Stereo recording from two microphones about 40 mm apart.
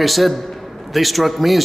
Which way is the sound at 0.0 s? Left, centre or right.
Centre.